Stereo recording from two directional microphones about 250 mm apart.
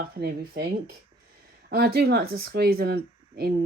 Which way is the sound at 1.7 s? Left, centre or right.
Right.